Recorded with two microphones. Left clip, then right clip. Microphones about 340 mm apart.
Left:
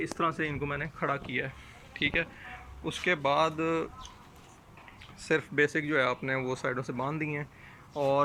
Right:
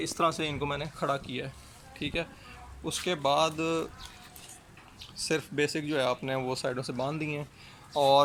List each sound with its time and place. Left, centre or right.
0.2 s speech: centre
5.3 s speech: centre